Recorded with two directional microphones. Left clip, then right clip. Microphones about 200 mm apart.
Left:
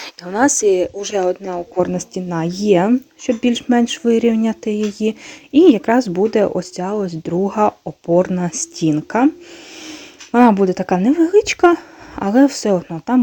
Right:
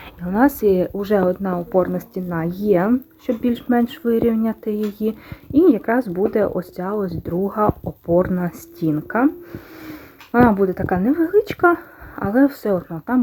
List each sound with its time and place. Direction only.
0.0 s speech: 50° left (ahead or behind)
6.1 s speech: 35° left (ahead or behind)
7.3 s speech: 40° left (ahead or behind)
7.9 s speech: 20° left (ahead or behind)
10.3 s speech: 35° left (ahead or behind)